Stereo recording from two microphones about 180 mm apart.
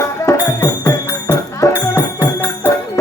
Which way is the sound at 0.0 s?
20° left (ahead or behind).